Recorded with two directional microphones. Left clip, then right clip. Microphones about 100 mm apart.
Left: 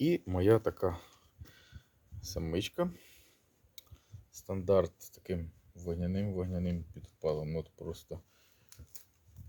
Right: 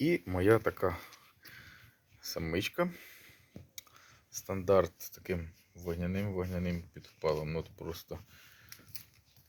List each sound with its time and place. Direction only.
0.0 s speech: 35° left (ahead or behind); by 8.2 s centre (ahead or behind)